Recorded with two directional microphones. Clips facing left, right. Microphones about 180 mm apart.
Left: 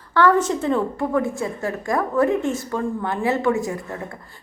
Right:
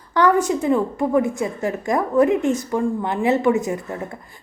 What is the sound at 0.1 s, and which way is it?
A woman's voice, 15° right (ahead or behind).